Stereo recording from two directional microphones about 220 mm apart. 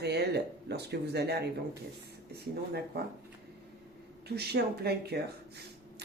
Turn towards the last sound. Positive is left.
turn(degrees=-45)  # may be behind; listen again after turning